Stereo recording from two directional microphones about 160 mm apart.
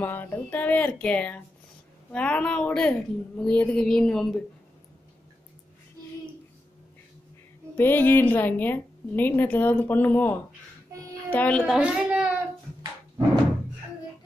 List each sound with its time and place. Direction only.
0.0 s a woman's voice: 10° left (ahead or behind)
7.7 s a woman's voice: 15° left (ahead or behind)
10.9 s music: 20° right (ahead or behind)
11.3 s a woman's voice: 5° left (ahead or behind)
11.8 s a child's voice: 10° right (ahead or behind)